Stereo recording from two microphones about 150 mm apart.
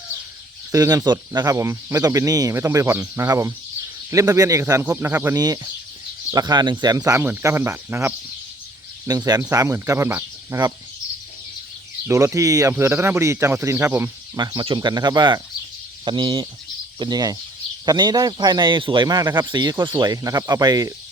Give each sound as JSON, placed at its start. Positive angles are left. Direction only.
{"t": 0.7, "sound": "speech", "side_deg": -20}
{"t": 12.0, "sound": "speech", "side_deg": -20}
{"t": 14.3, "sound": "speech", "side_deg": -30}